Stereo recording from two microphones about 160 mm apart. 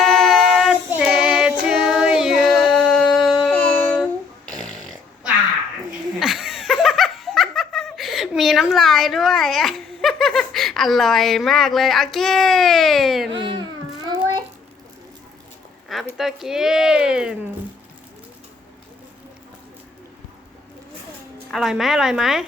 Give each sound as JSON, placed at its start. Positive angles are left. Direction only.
{"t": 0.2, "sound": "child singing", "side_deg": 0}
{"t": 4.8, "sound": "a sound", "side_deg": 0}
{"t": 6.1, "sound": "laughter", "side_deg": 0}
{"t": 13.4, "sound": "child singing", "side_deg": -30}
{"t": 15.9, "sound": "speech", "side_deg": 0}
{"t": 21.5, "sound": "speech", "side_deg": 0}